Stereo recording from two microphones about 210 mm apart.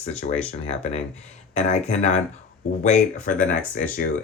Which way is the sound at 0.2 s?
45° left (ahead or behind).